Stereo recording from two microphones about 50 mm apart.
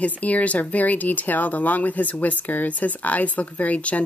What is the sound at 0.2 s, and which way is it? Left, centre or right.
Speech, left.